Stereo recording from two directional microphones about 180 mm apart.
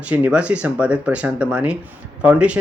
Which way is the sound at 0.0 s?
10° right (ahead or behind).